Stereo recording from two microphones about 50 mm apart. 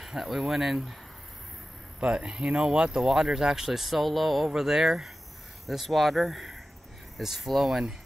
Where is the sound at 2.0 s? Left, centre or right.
Centre.